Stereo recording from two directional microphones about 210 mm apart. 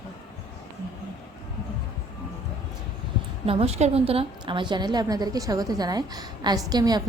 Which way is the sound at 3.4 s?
30° right (ahead or behind).